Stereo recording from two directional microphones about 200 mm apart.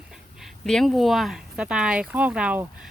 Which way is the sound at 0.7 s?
Centre (ahead or behind).